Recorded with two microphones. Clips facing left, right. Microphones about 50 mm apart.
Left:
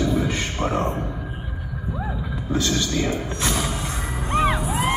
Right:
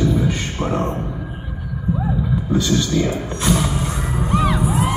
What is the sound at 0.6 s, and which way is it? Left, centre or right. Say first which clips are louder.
Speech: right 2 dB; centre.